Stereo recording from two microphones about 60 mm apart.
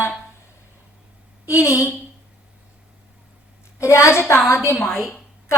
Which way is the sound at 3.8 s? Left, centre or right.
Left.